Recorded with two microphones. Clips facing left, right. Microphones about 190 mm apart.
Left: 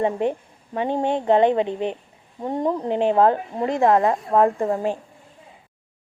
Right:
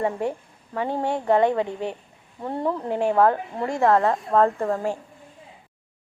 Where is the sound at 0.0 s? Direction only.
20° left (ahead or behind).